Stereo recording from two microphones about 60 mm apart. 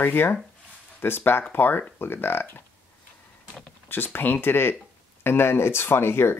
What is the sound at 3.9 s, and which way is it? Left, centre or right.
Speech, left.